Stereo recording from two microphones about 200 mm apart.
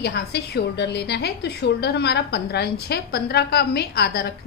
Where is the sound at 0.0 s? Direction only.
55° left (ahead or behind).